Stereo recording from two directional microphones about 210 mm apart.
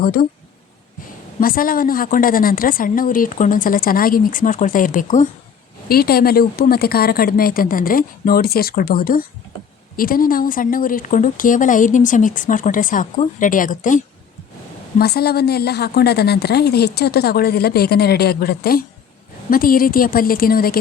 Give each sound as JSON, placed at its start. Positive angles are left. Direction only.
{"t": 0.0, "sound": "a woman's voice", "side_deg": 45}
{"t": 1.4, "sound": "a woman's voice", "side_deg": 45}
{"t": 14.9, "sound": "a woman's voice", "side_deg": 50}